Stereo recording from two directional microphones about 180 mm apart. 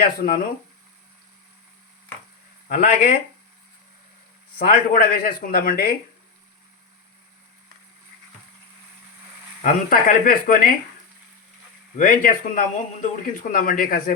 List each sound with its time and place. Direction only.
0.0 s speech: 55° left (ahead or behind)
2.6 s speech: 50° left (ahead or behind)
4.5 s speech: 55° left (ahead or behind)
9.6 s speech: 50° left (ahead or behind)
11.9 s speech: 50° left (ahead or behind)